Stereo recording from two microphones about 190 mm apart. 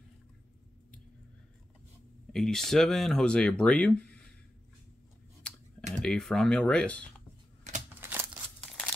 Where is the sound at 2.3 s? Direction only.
Centre (ahead or behind).